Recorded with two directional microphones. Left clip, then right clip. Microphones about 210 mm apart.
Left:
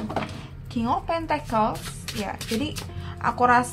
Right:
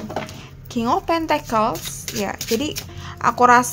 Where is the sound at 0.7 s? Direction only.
55° right (ahead or behind).